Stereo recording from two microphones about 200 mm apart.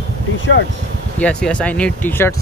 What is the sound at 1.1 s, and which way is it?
Speech, 5° left (ahead or behind).